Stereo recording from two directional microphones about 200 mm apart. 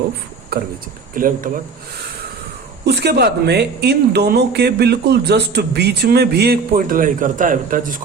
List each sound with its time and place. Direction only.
1.1 s speech: 45° right (ahead or behind)
2.8 s speech: 55° right (ahead or behind)